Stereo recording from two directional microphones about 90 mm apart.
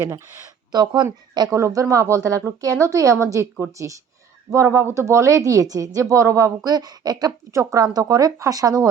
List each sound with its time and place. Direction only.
0.7 s a woman's voice: 50° right (ahead or behind)
1.5 s speech: 35° right (ahead or behind)
6.7 s a woman's voice: 45° right (ahead or behind)